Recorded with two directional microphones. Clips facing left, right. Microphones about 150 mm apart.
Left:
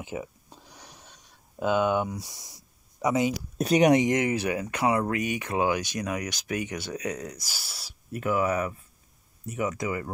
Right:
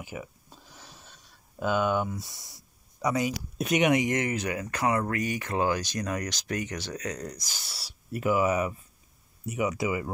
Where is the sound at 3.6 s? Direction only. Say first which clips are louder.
Left 4 dB; 35° left (ahead or behind).